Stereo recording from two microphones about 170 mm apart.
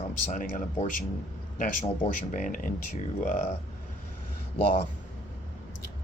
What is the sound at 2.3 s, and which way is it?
Speech, 50° left (ahead or behind).